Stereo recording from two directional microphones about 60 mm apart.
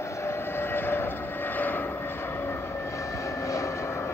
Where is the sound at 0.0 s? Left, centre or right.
Left.